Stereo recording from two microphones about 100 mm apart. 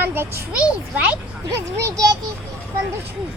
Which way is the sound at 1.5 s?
35° right (ahead or behind).